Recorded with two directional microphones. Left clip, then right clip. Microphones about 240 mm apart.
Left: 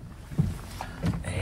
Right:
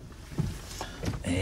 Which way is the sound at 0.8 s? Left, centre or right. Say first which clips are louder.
Left 2 dB; centre.